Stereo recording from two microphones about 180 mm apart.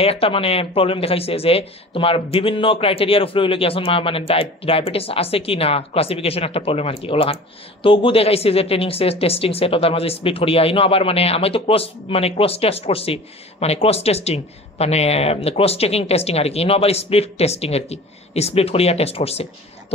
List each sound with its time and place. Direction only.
0.0 s speech: 35° left (ahead or behind)